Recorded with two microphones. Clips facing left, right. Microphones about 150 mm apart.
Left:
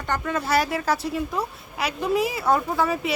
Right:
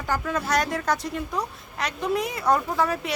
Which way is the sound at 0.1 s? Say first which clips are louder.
Left 1 dB; centre (ahead or behind).